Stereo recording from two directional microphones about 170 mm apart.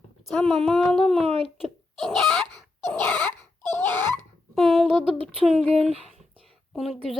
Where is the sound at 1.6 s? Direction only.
Centre (ahead or behind).